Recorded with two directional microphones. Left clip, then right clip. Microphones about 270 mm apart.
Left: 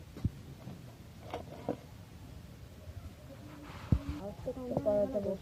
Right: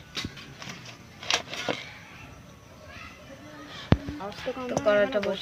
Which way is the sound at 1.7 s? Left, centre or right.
Right.